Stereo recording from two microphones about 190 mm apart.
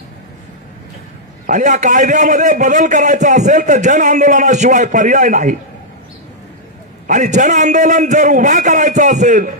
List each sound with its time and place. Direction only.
1.4 s a man's voice: 40° right (ahead or behind)
7.1 s a man's voice: 40° right (ahead or behind)